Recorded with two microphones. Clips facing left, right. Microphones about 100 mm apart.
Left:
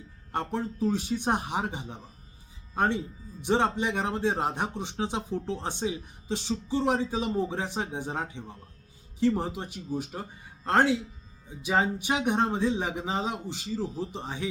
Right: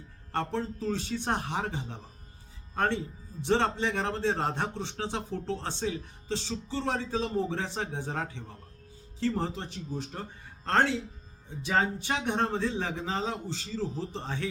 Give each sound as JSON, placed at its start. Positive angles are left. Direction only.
{"t": 0.3, "sound": "speech", "side_deg": 15}